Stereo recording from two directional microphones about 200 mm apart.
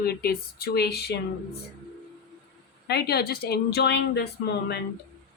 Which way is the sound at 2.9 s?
50° left (ahead or behind).